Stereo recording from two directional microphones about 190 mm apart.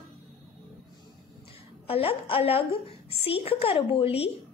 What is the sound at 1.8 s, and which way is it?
A woman's voice, 30° left (ahead or behind).